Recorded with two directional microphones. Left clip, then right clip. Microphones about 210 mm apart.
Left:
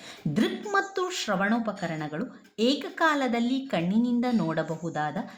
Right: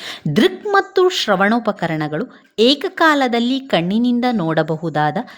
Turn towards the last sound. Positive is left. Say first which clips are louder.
# right 12 dB
turn(degrees=-45)  # may be behind; listen again after turning